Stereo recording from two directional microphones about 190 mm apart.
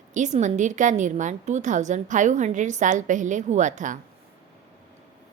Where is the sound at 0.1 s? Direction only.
40° right (ahead or behind).